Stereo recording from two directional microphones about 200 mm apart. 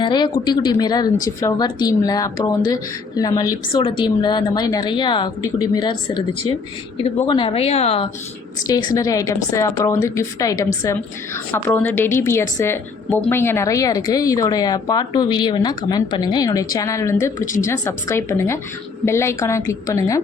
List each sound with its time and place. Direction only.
0.0 s a woman's voice: 20° left (ahead or behind)
8.6 s a woman's voice: 20° left (ahead or behind)